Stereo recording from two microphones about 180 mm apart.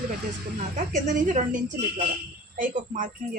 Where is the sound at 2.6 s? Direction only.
45° right (ahead or behind).